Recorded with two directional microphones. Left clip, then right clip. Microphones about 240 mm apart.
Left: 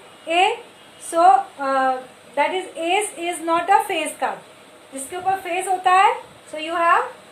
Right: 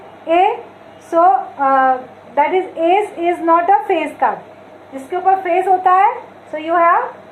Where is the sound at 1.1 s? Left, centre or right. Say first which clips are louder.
Right 2 dB; left.